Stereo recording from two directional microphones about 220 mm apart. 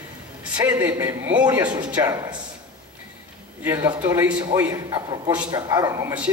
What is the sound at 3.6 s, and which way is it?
A man's voice, 15° right (ahead or behind).